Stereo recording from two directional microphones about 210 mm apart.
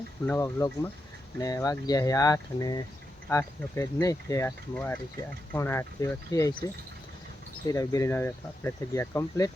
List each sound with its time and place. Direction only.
0.3 s speech: 15° left (ahead or behind)
7.7 s speech: 15° left (ahead or behind)